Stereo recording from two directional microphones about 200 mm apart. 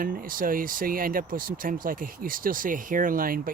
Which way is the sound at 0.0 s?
45° right (ahead or behind).